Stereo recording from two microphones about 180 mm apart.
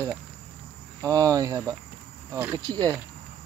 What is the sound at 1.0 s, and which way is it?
Speech, 20° right (ahead or behind).